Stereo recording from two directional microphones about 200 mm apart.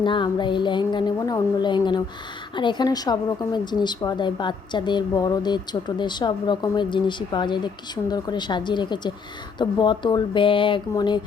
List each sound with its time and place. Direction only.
0.0 s a woman's voice: 25° left (ahead or behind)